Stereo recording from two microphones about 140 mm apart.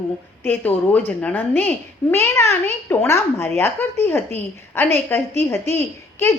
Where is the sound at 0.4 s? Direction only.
10° left (ahead or behind).